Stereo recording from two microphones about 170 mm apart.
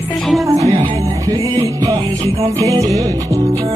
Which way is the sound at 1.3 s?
25° right (ahead or behind).